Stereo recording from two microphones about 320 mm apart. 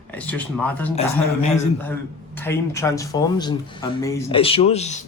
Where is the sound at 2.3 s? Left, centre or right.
Centre.